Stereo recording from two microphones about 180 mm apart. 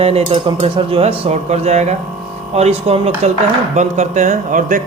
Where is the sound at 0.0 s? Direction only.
35° right (ahead or behind).